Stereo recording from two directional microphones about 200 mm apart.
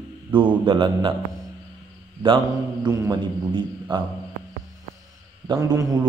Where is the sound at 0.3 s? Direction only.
25° right (ahead or behind).